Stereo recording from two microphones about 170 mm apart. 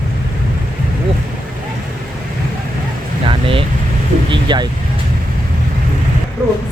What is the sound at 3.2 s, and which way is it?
Speech, 30° right (ahead or behind).